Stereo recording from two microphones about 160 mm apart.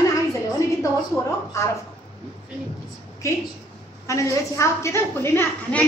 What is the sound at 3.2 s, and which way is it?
A woman's voice, 20° left (ahead or behind).